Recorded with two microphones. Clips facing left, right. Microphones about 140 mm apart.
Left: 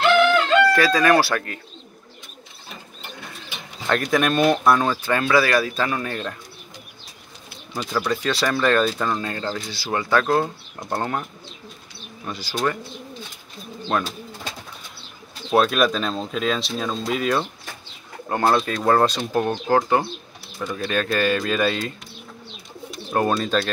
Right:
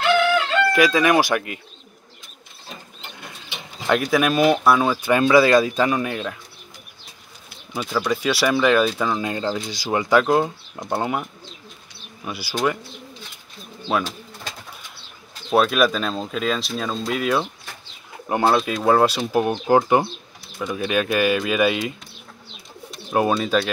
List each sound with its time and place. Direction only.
0.7 s speech: 15° right (ahead or behind)
3.8 s speech: 10° right (ahead or behind)
7.7 s speech: 10° right (ahead or behind)
12.3 s speech: 10° right (ahead or behind)
13.8 s speech: 5° right (ahead or behind)
15.5 s speech: centre (ahead or behind)
23.4 s speech: 5° right (ahead or behind)